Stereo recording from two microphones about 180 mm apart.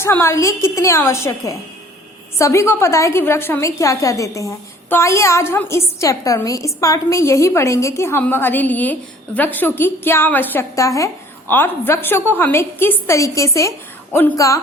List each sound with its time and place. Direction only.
0.0 s a woman's voice: 15° left (ahead or behind)